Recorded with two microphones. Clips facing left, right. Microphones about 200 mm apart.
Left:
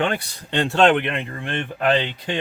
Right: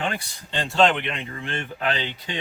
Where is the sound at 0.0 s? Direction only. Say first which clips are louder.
Left 6 dB; 65° left (ahead or behind).